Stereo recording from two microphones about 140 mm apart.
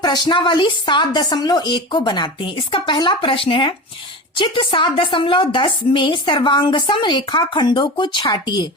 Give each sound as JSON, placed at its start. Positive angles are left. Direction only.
{"t": 0.0, "sound": "a woman's voice", "side_deg": 35}